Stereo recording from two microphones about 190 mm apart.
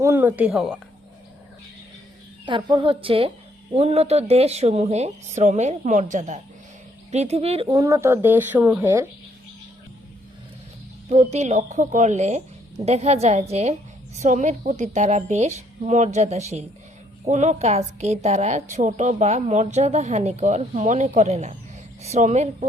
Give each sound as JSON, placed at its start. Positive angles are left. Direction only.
{"t": 0.0, "sound": "speech", "side_deg": -15}
{"t": 2.5, "sound": "a woman's voice", "side_deg": -25}
{"t": 7.8, "sound": "speech", "side_deg": -15}
{"t": 11.1, "sound": "a woman's voice", "side_deg": -35}